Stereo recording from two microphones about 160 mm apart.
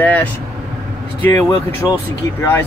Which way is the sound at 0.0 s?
10° left (ahead or behind).